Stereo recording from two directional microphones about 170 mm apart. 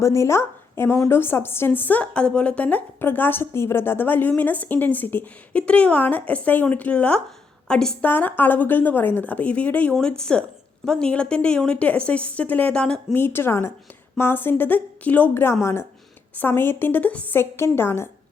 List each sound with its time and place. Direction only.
0.0 s a woman's voice: 15° left (ahead or behind)